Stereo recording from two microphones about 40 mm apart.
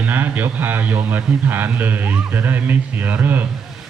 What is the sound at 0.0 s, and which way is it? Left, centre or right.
A man's voice, right.